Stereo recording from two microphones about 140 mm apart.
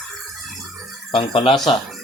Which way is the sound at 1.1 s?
40° left (ahead or behind).